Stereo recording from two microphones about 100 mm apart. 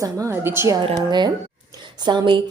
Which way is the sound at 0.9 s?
45° right (ahead or behind).